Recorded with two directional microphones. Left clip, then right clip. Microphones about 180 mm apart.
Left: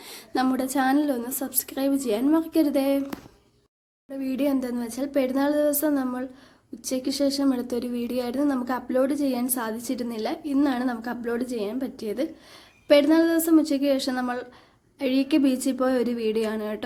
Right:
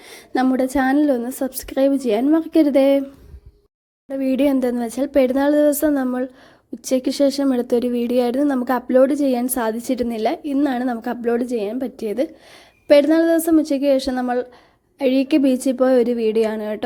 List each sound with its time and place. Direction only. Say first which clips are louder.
0.0 s a woman's voice: right 5 dB; 30° right (ahead or behind)
4.1 s a woman's voice: right 8 dB; 40° right (ahead or behind)